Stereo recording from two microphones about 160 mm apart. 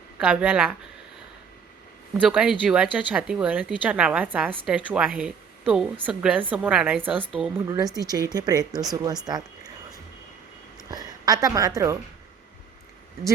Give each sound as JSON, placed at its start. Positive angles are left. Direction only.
{"t": 0.2, "sound": "a woman's voice", "side_deg": -10}
{"t": 2.2, "sound": "a woman's voice", "side_deg": -5}
{"t": 7.9, "sound": "speech", "side_deg": -25}
{"t": 9.2, "sound": "a sound", "side_deg": -25}
{"t": 10.8, "sound": "a woman's voice", "side_deg": -25}